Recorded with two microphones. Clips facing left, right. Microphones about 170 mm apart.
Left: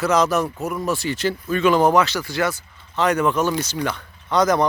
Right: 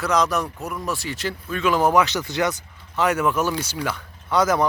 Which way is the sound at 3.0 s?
5° right (ahead or behind).